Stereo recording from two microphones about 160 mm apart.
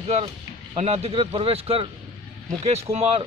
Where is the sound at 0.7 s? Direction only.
40° right (ahead or behind).